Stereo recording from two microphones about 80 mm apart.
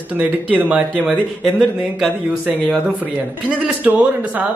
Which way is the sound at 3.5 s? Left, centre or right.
Centre.